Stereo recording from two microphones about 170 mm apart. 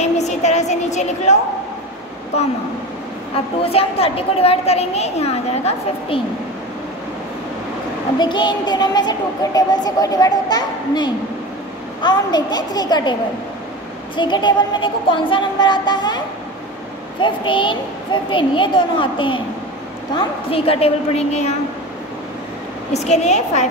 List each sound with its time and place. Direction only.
0.0 s a sound: 40° left (ahead or behind)
2.3 s a woman's voice: 40° left (ahead or behind)
3.6 s a woman's voice: 35° left (ahead or behind)
8.2 s speech: 25° left (ahead or behind)
14.1 s speech: 25° left (ahead or behind)
17.2 s a woman's voice: 30° left (ahead or behind)
22.9 s a woman's voice: 40° left (ahead or behind)